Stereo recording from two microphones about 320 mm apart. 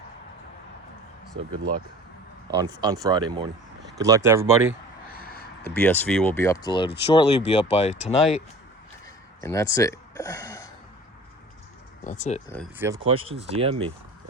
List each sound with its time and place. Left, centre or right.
2.6 s speech: centre
5.1 s a sound: left
5.7 s speech: centre; by 8.4 s left
9.4 s speech: centre
12.0 s speech: left
13.1 s speech: centre